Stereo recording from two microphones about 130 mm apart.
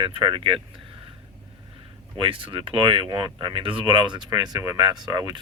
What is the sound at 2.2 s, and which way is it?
Speech, 45° right (ahead or behind).